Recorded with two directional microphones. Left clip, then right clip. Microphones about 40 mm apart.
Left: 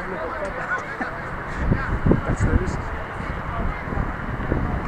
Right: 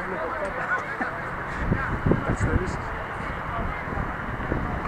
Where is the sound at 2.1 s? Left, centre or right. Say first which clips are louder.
Left 4 dB; left.